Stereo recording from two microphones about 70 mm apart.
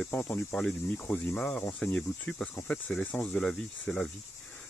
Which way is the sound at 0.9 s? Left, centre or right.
Left.